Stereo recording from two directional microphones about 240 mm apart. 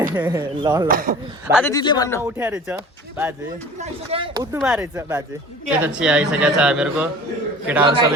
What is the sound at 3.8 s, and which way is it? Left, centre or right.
Speech, right.